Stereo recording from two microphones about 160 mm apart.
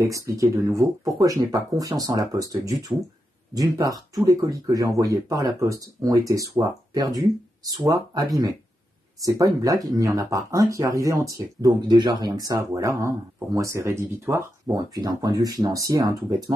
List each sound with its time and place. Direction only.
0.0 s speech: 20° right (ahead or behind)